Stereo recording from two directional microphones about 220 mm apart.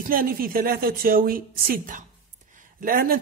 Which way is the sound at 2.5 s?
35° right (ahead or behind).